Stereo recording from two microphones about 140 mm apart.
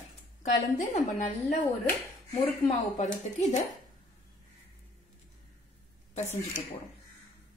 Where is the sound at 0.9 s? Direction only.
60° left (ahead or behind).